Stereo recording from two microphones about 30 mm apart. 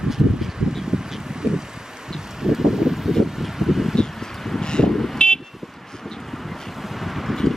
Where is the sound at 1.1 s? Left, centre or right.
Right.